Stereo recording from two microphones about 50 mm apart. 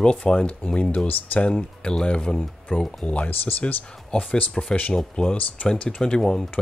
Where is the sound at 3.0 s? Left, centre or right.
Left.